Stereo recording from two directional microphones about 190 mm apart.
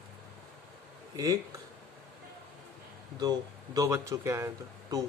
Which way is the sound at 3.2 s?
20° right (ahead or behind).